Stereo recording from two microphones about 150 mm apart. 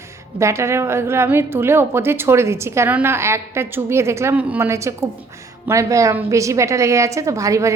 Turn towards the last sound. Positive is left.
turn(degrees=-20)  # may be behind; listen again after turning